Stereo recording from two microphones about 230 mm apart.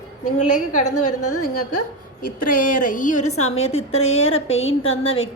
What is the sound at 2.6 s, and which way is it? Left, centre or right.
Speech, left.